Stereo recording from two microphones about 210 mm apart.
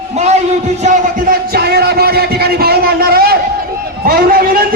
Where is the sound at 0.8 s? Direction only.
45° right (ahead or behind).